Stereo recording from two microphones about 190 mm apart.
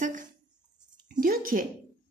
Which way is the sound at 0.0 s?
40° right (ahead or behind).